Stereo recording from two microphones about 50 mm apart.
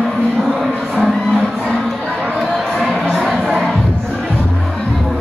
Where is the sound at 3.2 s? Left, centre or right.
Centre.